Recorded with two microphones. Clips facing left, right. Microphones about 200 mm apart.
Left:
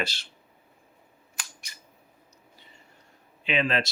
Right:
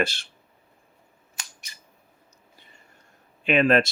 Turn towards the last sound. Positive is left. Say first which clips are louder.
# right 7 dB
turn(degrees=-50)  # may be behind; listen again after turning